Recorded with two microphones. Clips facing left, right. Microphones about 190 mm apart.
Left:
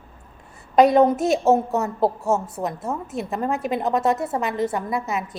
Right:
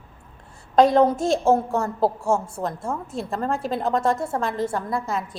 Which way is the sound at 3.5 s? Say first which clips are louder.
Left 1 dB; 20° left (ahead or behind).